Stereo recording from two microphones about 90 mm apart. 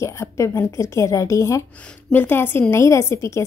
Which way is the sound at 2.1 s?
20° left (ahead or behind).